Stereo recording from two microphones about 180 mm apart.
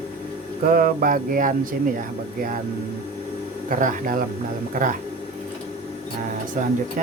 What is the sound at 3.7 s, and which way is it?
Speech, 45° right (ahead or behind).